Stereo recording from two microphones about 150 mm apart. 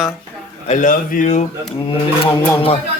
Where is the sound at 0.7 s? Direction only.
60° left (ahead or behind).